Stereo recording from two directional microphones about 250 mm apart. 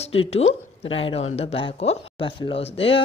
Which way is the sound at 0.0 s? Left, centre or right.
Left.